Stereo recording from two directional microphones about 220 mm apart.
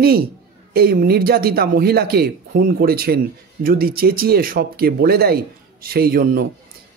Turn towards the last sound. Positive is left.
turn(degrees=-45)  # may be behind; listen again after turning